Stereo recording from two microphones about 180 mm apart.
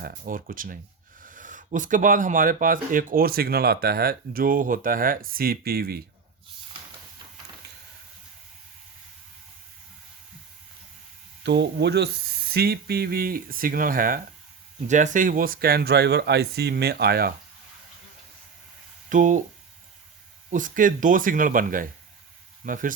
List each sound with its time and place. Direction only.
0.0 s speech: 50° right (ahead or behind)
11.4 s speech: 70° right (ahead or behind)
19.1 s speech: 45° right (ahead or behind)
20.5 s speech: 45° right (ahead or behind)